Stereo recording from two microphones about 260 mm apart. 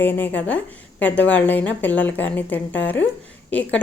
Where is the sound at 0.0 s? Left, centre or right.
Centre.